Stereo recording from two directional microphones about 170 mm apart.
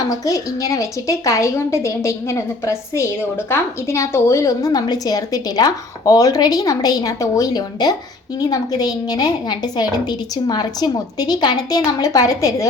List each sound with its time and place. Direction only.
0.1 s a woman's voice: 20° left (ahead or behind)